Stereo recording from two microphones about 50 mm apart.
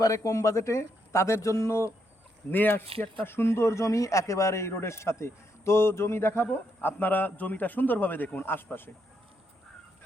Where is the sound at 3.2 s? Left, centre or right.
Left.